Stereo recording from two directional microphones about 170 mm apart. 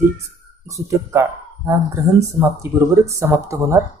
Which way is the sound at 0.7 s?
15° right (ahead or behind).